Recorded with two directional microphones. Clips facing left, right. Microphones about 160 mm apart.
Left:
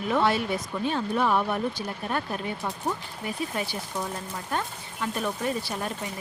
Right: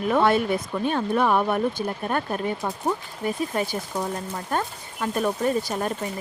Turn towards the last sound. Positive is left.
turn(degrees=-45)  # may be behind; listen again after turning